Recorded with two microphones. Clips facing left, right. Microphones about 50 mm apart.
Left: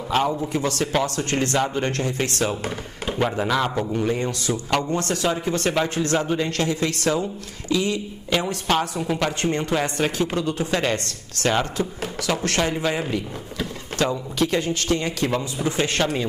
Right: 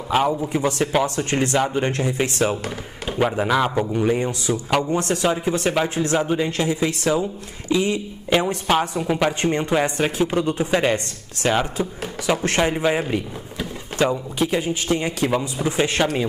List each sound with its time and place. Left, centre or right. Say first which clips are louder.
0.1 s speech: right 2 dB; centre
0.5 s a man's voice: right 2 dB; centre
12.4 s a man's voice: right 3 dB; right